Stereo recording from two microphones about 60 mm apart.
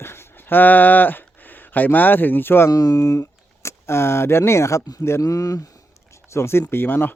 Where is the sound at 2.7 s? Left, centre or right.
Left.